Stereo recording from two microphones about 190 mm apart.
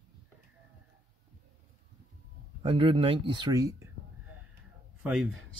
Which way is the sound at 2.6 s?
30° right (ahead or behind).